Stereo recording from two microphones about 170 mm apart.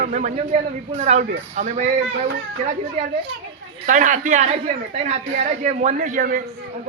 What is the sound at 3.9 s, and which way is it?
A man's voice, 50° right (ahead or behind).